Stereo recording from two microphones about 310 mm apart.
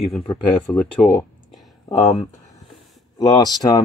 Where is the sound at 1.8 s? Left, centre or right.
Centre.